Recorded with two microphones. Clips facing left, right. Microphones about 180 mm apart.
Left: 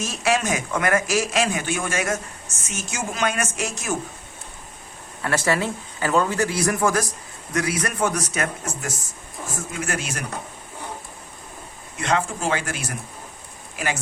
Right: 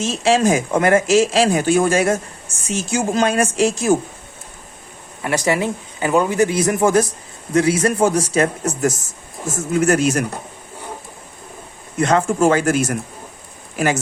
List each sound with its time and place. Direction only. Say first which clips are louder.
0.0 s a man's voice: right 7 dB; 25° right (ahead or behind)
5.2 s a man's voice: right 4 dB; 15° right (ahead or behind); by 8.7 s 30° right (ahead or behind)
8.8 s a man's voice: right 12 dB; 45° right (ahead or behind)
11.9 s speech: right 8 dB; 45° right (ahead or behind)